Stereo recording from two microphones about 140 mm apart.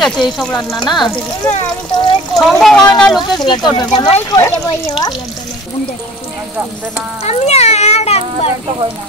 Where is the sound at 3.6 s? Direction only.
30° left (ahead or behind).